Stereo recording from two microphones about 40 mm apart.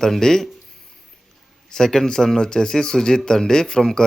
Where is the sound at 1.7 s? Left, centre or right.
Centre.